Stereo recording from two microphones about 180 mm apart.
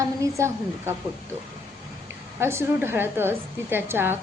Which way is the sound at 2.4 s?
15° right (ahead or behind).